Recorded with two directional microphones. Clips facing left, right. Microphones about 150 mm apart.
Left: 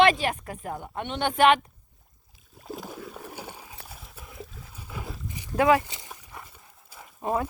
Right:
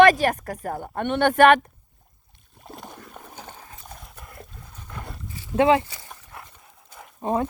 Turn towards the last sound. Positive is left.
turn(degrees=-25)  # may be behind; listen again after turning